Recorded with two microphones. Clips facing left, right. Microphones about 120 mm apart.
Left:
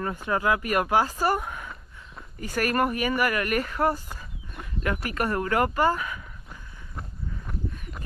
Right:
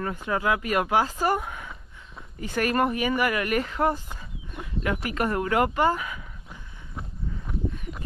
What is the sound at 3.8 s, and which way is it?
Speech, 45° right (ahead or behind).